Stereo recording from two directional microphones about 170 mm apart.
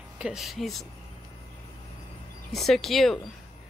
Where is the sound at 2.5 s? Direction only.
Centre (ahead or behind).